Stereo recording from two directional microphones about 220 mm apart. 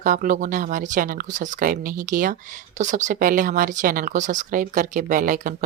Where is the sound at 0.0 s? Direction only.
35° right (ahead or behind).